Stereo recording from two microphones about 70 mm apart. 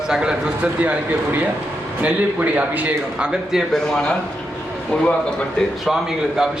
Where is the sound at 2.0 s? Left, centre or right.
Right.